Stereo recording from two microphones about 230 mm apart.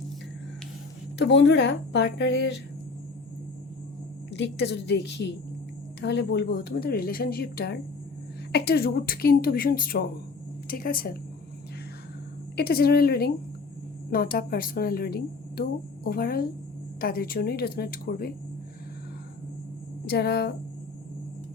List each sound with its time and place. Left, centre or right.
1.2 s speech: left
4.3 s speech: left
12.5 s speech: left
20.1 s speech: left